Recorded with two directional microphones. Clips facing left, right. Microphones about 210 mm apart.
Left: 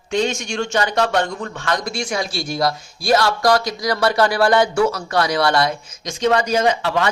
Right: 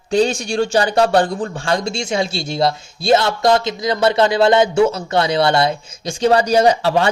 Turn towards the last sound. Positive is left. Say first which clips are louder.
# right 4 dB
turn(degrees=-35)  # may be behind; listen again after turning